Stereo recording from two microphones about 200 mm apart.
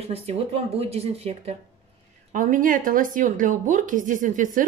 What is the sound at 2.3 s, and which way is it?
Speech, 40° right (ahead or behind).